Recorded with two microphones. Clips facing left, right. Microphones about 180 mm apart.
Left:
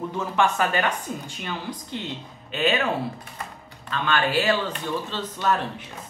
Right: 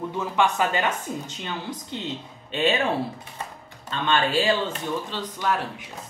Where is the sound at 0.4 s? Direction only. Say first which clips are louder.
Even; 20° right (ahead or behind).